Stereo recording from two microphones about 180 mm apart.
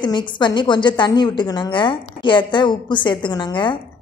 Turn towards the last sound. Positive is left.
turn(degrees=25)  # may be behind; listen again after turning